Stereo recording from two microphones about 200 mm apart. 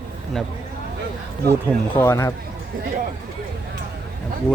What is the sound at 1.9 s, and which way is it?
Speech, 15° left (ahead or behind).